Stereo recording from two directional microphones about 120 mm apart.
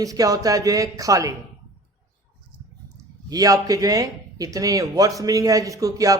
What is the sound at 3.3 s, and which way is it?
Speech, 30° right (ahead or behind).